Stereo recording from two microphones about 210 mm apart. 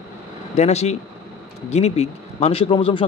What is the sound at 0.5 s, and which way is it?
A man's voice, 30° left (ahead or behind).